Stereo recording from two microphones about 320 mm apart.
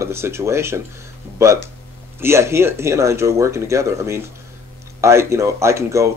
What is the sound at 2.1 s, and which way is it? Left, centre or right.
Speech, centre.